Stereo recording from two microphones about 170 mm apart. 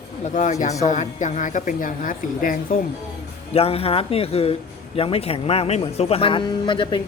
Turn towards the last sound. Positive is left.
turn(degrees=30)  # may be behind; listen again after turning